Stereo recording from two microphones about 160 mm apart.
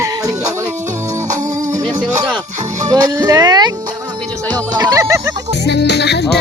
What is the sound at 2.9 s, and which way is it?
Speech, 25° right (ahead or behind).